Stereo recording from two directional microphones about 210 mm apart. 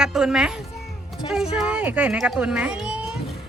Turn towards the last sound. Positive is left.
turn(degrees=-5)  # may be behind; listen again after turning